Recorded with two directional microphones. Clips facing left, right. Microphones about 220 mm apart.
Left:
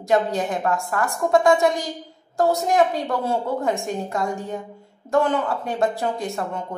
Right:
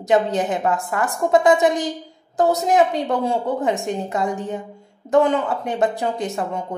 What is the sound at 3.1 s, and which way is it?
Speech, 15° right (ahead or behind).